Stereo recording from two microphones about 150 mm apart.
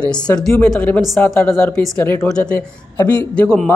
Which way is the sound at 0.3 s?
10° left (ahead or behind).